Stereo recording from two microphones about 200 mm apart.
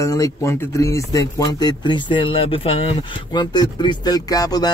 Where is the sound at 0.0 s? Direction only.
15° left (ahead or behind).